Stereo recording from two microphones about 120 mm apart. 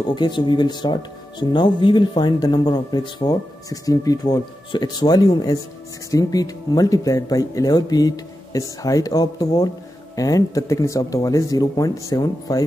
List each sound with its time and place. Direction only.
0.0 s speech: 40° left (ahead or behind)